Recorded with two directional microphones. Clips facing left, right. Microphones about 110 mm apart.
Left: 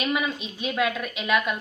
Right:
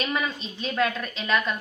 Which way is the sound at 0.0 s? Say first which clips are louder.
Left 2 dB; 10° left (ahead or behind).